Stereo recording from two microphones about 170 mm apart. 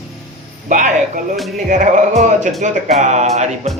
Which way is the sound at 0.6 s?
50° right (ahead or behind).